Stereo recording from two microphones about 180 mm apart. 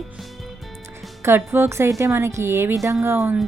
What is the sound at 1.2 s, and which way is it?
Speech, 15° right (ahead or behind).